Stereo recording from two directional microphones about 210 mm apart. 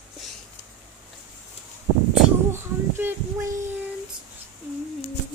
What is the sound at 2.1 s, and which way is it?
Speech, 10° right (ahead or behind).